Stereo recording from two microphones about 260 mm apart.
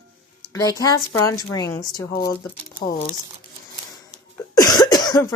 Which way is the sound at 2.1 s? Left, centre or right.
Left.